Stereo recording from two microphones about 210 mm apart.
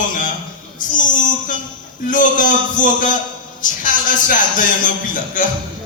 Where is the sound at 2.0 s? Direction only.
40° left (ahead or behind).